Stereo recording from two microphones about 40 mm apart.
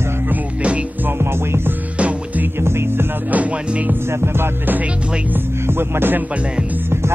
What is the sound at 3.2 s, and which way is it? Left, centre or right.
Music, right.